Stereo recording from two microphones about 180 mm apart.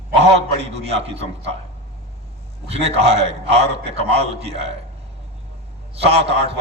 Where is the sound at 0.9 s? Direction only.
35° right (ahead or behind).